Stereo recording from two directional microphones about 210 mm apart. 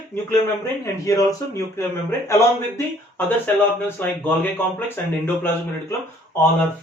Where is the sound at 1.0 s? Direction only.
15° left (ahead or behind).